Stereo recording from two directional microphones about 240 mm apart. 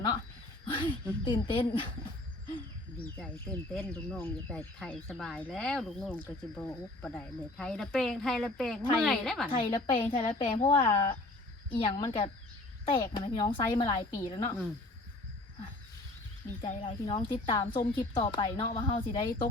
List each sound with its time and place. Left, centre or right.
0.7 s a woman's voice: left
3.8 s speech: centre
9.5 s a woman's voice: centre
16.6 s a woman's voice: centre